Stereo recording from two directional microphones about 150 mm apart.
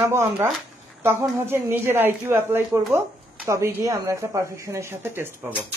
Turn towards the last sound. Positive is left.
turn(degrees=-15)  # may be behind; listen again after turning